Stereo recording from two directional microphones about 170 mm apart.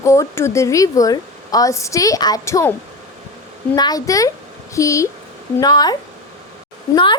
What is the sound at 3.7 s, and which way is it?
A woman's voice, 25° left (ahead or behind).